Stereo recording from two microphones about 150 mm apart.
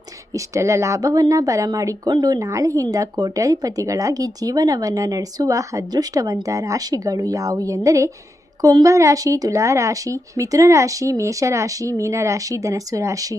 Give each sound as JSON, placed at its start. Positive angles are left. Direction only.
{"t": 0.3, "sound": "speech", "side_deg": -20}